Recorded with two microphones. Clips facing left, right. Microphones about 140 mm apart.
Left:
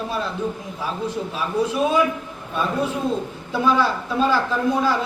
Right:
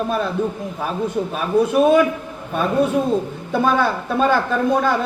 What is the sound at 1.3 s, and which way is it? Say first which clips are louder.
A man's voice: right 7 dB; 55° right (ahead or behind).